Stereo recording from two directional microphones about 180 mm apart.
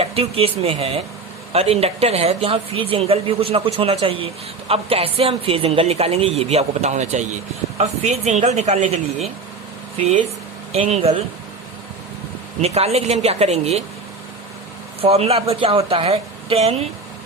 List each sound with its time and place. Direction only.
0.0 s speech: 35° right (ahead or behind)
12.6 s speech: 35° right (ahead or behind)
15.0 s speech: 35° right (ahead or behind)